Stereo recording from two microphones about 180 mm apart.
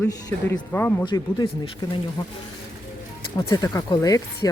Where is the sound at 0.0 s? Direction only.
10° left (ahead or behind).